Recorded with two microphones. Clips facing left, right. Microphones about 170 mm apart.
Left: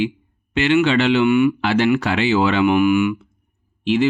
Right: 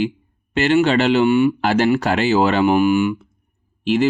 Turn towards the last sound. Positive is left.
turn(degrees=-40)  # may be behind; listen again after turning